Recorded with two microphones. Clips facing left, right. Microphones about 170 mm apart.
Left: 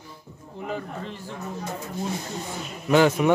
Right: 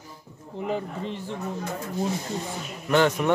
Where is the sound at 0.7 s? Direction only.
25° right (ahead or behind).